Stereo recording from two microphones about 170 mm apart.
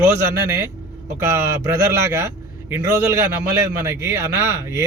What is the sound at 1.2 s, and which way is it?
A man's voice, 15° right (ahead or behind).